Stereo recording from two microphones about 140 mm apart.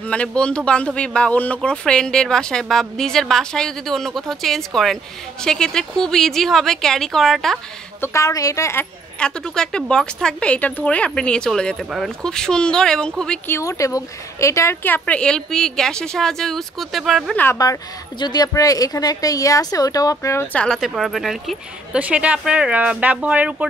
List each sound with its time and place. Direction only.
0.0 s a man's voice: 10° left (ahead or behind)
8.0 s speech: 20° left (ahead or behind)
9.2 s a man's voice: 5° left (ahead or behind)
13.5 s a man's voice: 20° left (ahead or behind); by 17.4 s centre (ahead or behind)
17.4 s speech: 20° left (ahead or behind)
20.5 s speech: 5° left (ahead or behind)